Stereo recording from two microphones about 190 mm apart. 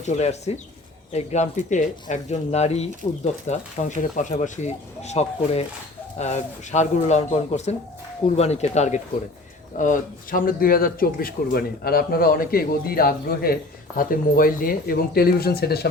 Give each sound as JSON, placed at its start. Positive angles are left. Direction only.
{"t": 0.0, "sound": "speech", "side_deg": 35}